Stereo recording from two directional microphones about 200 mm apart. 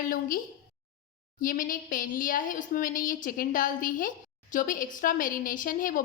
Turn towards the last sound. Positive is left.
turn(degrees=45)  # may be behind; listen again after turning